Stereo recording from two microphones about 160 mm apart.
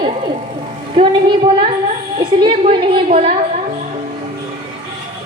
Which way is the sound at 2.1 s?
30° right (ahead or behind).